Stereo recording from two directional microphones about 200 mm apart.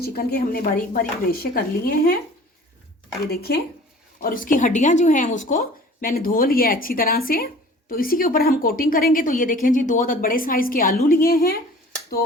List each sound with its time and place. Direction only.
0.0 s speech: 50° left (ahead or behind)
3.2 s speech: 50° left (ahead or behind)